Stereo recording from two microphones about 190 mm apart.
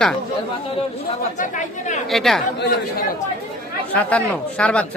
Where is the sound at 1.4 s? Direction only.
40° left (ahead or behind).